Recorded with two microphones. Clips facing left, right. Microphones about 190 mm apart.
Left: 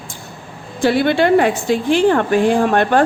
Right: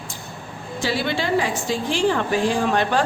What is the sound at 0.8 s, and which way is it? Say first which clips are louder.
Speech: left 10 dB; 55° left (ahead or behind).